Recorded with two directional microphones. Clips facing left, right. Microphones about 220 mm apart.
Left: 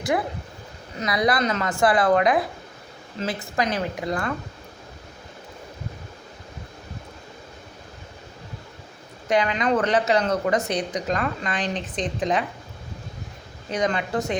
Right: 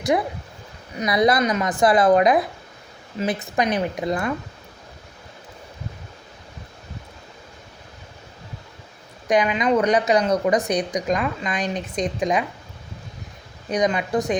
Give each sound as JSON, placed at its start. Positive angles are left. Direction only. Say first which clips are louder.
{"t": 0.1, "sound": "a woman's voice", "louder": "right 2 dB", "side_deg": -20}
{"t": 9.3, "sound": "speech", "louder": "right 2 dB", "side_deg": -15}
{"t": 13.7, "sound": "speech", "louder": "right 3 dB", "side_deg": -15}